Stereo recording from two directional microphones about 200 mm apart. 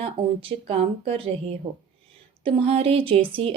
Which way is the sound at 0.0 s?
30° right (ahead or behind).